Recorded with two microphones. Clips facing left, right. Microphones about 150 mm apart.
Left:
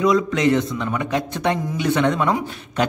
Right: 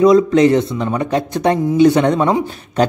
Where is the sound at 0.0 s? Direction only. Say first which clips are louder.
Right 8 dB; 35° right (ahead or behind).